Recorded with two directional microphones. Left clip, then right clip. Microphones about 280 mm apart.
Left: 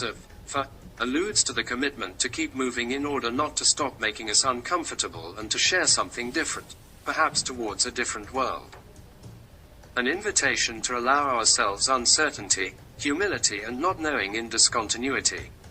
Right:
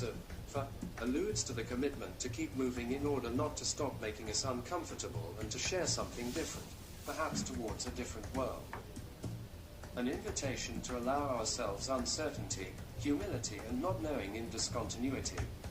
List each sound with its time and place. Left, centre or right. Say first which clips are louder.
1.1 s speech: left 12 dB; left
9.9 s speech: left 14 dB; left